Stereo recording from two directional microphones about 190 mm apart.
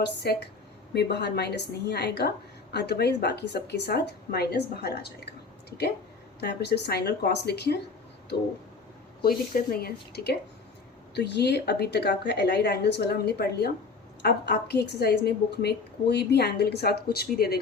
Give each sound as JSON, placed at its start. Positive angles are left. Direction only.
{"t": 0.0, "sound": "a woman's voice", "side_deg": 60}
{"t": 6.4, "sound": "a woman's voice", "side_deg": 60}
{"t": 9.7, "sound": "a woman's voice", "side_deg": 55}